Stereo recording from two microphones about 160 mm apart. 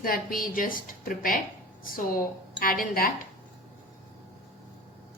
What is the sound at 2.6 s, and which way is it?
Speech, 65° left (ahead or behind).